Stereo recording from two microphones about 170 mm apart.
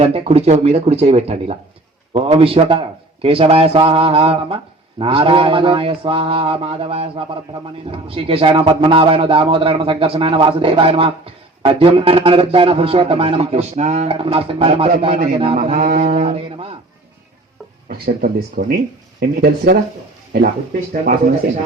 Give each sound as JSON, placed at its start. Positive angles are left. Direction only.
{"t": 0.0, "sound": "a man's voice", "side_deg": -35}
{"t": 15.5, "sound": "a man's voice", "side_deg": -45}
{"t": 17.8, "sound": "speech", "side_deg": -60}
{"t": 20.9, "sound": "speech", "side_deg": -55}